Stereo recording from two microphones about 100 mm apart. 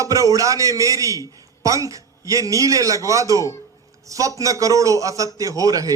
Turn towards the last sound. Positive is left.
turn(degrees=-35)  # may be behind; listen again after turning